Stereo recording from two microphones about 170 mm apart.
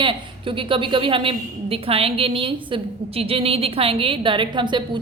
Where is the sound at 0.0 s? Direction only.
30° right (ahead or behind).